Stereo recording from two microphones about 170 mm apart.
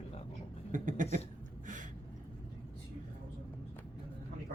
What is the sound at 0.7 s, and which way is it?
Speech, 50° right (ahead or behind).